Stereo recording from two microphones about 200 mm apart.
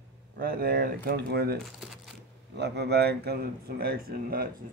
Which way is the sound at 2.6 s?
55° right (ahead or behind).